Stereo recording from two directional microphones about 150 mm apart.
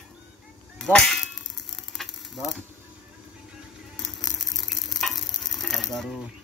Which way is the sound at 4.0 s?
Centre (ahead or behind).